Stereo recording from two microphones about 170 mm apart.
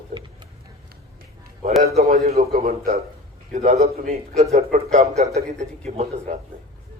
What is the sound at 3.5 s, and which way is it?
A man's voice, 45° right (ahead or behind).